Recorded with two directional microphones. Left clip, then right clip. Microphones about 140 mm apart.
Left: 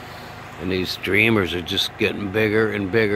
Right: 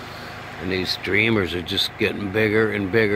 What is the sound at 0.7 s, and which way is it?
Speech, 25° left (ahead or behind).